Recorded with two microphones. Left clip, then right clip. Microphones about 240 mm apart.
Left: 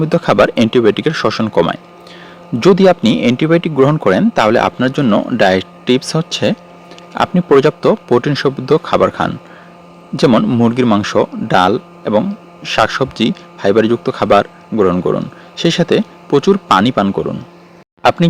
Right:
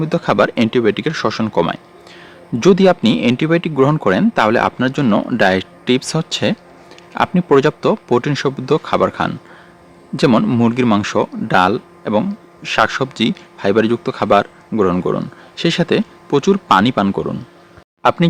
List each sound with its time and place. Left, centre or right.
0.0 s speech: centre